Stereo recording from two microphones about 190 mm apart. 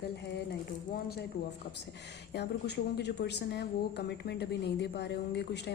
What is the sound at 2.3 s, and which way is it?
A woman's voice, 60° left (ahead or behind).